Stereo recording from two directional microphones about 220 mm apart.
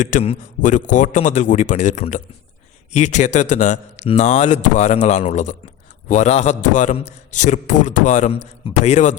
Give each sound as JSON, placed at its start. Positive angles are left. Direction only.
{"t": 0.0, "sound": "a man's voice", "side_deg": 35}